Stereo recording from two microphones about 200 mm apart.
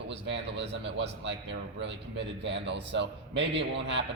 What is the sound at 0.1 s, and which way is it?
Speech, 60° right (ahead or behind).